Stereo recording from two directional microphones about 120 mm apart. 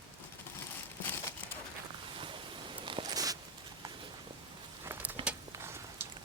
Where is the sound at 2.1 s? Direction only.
45° right (ahead or behind).